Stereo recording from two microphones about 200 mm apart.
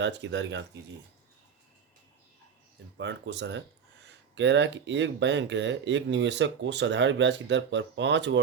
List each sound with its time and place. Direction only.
0.0 s speech: 65° right (ahead or behind)
3.0 s speech: 60° right (ahead or behind)